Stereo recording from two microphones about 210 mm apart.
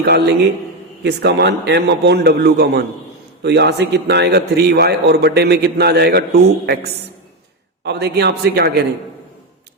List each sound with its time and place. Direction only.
1.0 s a man's voice: 50° right (ahead or behind)